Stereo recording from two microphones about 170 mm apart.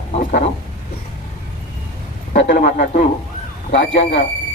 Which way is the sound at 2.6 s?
45° left (ahead or behind).